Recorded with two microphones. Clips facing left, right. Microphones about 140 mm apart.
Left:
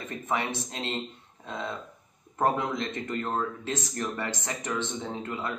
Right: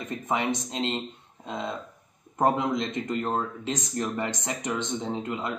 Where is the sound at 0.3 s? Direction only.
20° right (ahead or behind).